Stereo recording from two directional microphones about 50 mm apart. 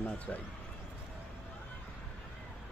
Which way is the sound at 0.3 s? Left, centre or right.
Left.